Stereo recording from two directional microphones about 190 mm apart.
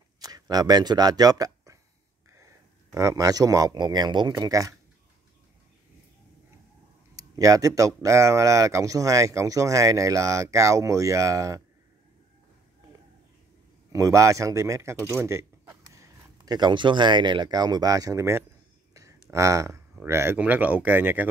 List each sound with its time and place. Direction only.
0.2 s speech: 20° right (ahead or behind)
7.2 s speech: 15° right (ahead or behind)
13.9 s speech: 15° right (ahead or behind)
18.9 s a sound: 15° right (ahead or behind)
20.0 s speech: 15° right (ahead or behind)